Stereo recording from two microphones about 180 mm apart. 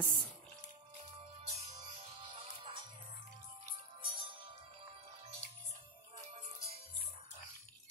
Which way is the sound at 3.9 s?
30° right (ahead or behind).